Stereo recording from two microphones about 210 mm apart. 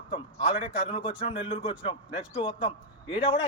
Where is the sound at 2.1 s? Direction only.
5° right (ahead or behind).